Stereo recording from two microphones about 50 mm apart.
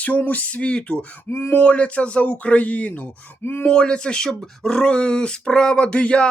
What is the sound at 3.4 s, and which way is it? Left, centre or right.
Speech, left.